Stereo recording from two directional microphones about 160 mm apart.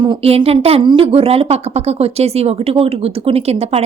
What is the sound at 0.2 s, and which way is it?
A woman's voice, 40° right (ahead or behind).